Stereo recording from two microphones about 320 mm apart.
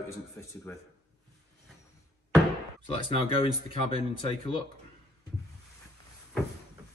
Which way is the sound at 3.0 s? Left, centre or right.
Centre.